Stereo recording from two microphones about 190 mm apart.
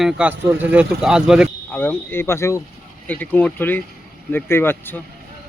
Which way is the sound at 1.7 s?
10° left (ahead or behind).